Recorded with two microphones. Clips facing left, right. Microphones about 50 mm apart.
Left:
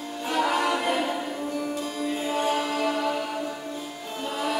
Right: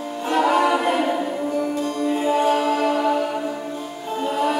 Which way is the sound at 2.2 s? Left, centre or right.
Centre.